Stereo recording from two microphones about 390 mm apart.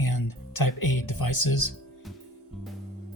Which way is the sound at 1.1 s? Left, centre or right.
Left.